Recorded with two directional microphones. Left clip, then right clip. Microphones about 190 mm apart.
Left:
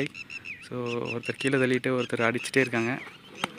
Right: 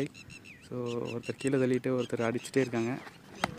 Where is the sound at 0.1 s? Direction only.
25° right (ahead or behind).